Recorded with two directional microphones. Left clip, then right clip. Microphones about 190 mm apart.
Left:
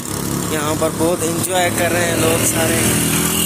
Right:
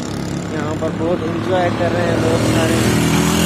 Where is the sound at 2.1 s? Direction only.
35° left (ahead or behind).